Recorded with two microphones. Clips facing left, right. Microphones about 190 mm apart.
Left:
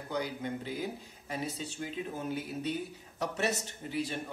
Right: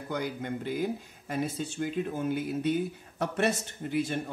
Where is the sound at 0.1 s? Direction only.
55° right (ahead or behind).